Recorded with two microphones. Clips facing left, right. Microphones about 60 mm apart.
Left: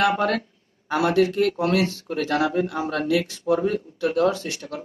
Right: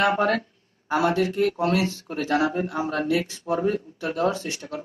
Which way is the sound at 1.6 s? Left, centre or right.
Left.